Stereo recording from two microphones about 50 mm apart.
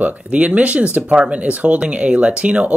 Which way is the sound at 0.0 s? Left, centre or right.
Right.